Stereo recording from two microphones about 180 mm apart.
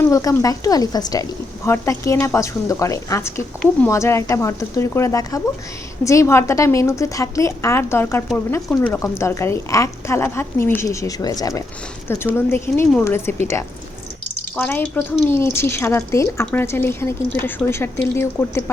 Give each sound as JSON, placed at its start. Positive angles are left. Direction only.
{"t": 0.0, "sound": "a woman's voice", "side_deg": 15}